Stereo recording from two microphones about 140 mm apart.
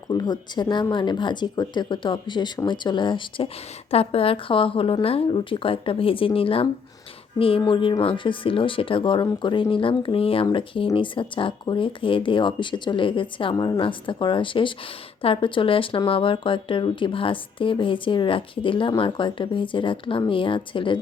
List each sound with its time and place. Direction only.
0.1 s speech: 30° left (ahead or behind)